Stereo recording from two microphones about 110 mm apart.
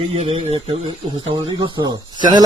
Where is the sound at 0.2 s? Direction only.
65° right (ahead or behind).